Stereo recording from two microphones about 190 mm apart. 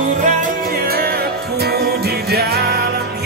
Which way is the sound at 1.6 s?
55° right (ahead or behind).